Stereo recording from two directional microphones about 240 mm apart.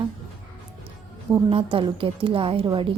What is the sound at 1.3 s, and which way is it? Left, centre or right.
A woman's voice, centre.